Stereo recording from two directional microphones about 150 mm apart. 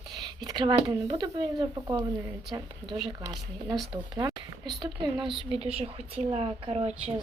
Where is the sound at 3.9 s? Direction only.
30° right (ahead or behind).